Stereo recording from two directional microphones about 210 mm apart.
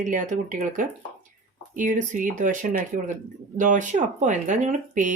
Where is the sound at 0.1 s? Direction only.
40° right (ahead or behind).